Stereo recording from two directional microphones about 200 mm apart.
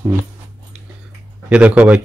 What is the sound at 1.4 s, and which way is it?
Speech, 5° right (ahead or behind).